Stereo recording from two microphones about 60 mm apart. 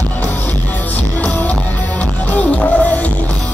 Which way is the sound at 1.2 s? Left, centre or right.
Left.